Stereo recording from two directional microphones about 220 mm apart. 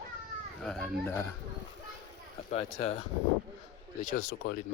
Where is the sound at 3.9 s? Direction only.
40° left (ahead or behind).